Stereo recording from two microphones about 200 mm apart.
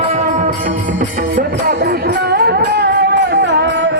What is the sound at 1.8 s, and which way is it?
Music, 50° right (ahead or behind).